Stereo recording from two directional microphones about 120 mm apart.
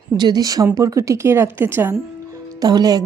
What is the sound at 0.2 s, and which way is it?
A woman's voice, 35° right (ahead or behind).